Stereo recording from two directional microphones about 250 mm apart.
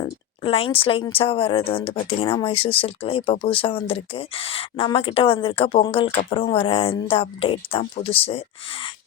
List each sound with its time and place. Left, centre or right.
0.0 s speech: left